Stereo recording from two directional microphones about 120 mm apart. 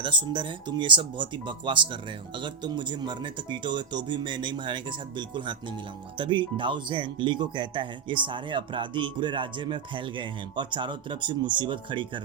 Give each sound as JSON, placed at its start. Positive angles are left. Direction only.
{"t": 0.0, "sound": "speech", "side_deg": -40}